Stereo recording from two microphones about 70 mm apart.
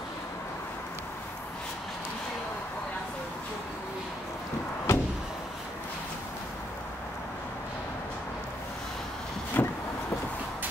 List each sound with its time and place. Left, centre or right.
4.9 s vehicle: left
9.6 s vehicle: left